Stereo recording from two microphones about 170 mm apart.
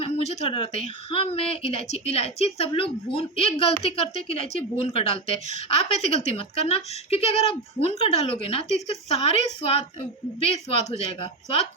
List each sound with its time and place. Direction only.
0.0 s a woman's voice: 40° left (ahead or behind)